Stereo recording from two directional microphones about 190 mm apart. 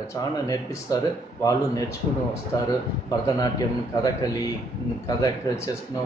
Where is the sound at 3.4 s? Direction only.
20° left (ahead or behind).